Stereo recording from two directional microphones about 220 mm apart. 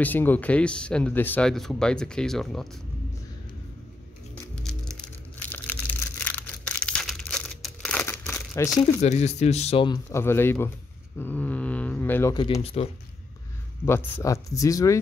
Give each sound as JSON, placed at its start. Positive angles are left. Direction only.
{"t": 0.0, "sound": "speech", "side_deg": 10}
{"t": 5.4, "sound": "crushing", "side_deg": 10}
{"t": 8.6, "sound": "speech", "side_deg": 15}
{"t": 9.0, "sound": "speech", "side_deg": 30}
{"t": 10.1, "sound": "speech", "side_deg": 10}
{"t": 13.8, "sound": "speech", "side_deg": 10}